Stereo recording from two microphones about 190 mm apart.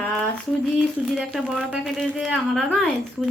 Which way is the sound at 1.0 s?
5° right (ahead or behind).